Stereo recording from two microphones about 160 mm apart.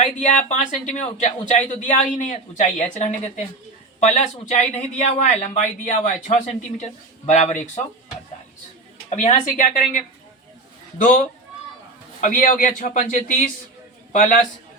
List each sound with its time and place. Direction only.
0.0 s a man's voice: 50° left (ahead or behind)
9.0 s a man's voice: 45° left (ahead or behind)